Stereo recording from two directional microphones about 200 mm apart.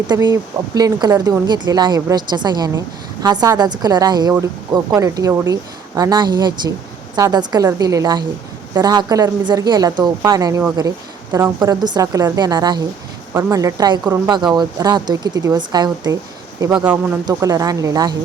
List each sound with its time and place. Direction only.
0.1 s speech: 20° right (ahead or behind)
16.7 s a woman's voice: 10° right (ahead or behind)